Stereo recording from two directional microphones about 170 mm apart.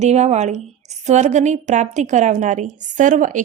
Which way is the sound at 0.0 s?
40° right (ahead or behind).